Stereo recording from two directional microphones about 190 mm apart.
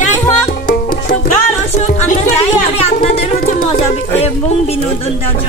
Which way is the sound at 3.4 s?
50° left (ahead or behind).